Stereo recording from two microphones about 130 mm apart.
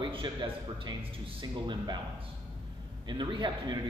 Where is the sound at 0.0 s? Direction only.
35° right (ahead or behind).